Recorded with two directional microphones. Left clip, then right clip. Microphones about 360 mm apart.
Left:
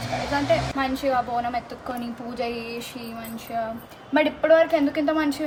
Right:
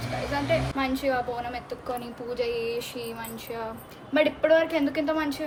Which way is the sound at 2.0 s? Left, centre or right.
Centre.